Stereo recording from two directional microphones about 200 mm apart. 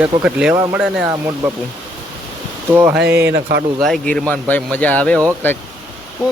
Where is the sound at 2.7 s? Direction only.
10° right (ahead or behind).